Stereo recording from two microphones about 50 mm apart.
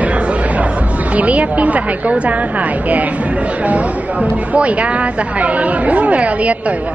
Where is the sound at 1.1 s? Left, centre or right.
Right.